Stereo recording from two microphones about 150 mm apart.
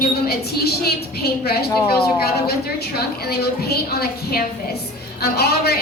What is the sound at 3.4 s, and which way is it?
A woman's voice, 90° left.